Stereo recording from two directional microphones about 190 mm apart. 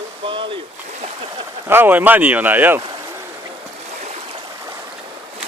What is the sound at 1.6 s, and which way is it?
Speech, 10° right (ahead or behind).